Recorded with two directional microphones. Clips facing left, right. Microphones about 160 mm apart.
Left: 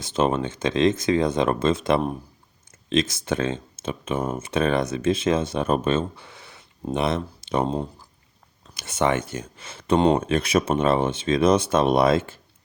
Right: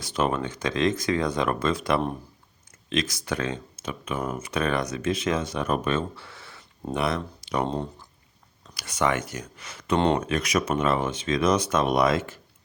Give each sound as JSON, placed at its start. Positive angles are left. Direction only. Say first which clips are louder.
{"t": 0.0, "sound": "speech", "louder": "left 3 dB", "side_deg": 25}
{"t": 7.7, "sound": "speech", "louder": "left 3 dB", "side_deg": 5}
{"t": 8.7, "sound": "speech", "louder": "left 3 dB", "side_deg": 25}